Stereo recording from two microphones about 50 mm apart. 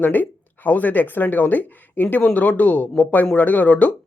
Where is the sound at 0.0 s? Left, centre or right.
Left.